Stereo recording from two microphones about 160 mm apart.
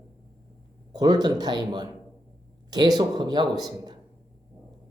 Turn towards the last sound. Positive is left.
turn(degrees=-25)  # may be behind; listen again after turning